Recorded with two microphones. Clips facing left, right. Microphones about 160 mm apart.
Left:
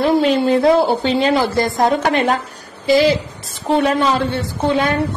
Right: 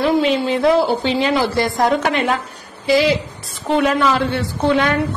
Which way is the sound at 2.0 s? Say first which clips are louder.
Left 2 dB; 40° left (ahead or behind).